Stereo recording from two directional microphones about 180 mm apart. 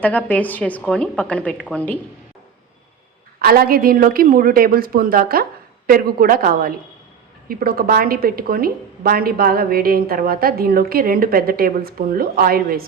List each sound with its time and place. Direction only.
0.0 s a woman's voice: 10° left (ahead or behind)
3.4 s a woman's voice: 55° right (ahead or behind)